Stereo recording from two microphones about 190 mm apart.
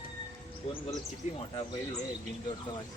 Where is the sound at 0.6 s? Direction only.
35° left (ahead or behind).